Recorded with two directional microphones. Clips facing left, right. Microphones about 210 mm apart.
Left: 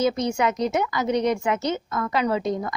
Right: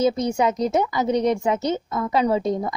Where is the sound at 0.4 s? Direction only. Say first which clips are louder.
Right 4 dB; 30° right (ahead or behind).